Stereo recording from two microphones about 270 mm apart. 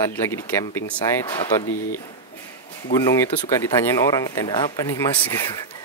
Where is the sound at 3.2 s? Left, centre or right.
Centre.